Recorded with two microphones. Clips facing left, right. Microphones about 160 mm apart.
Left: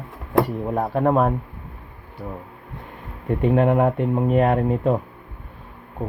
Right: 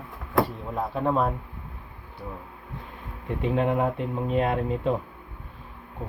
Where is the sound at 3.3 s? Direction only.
55° left (ahead or behind).